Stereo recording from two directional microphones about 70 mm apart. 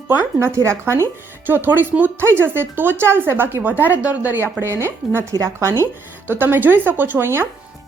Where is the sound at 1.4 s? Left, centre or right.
Right.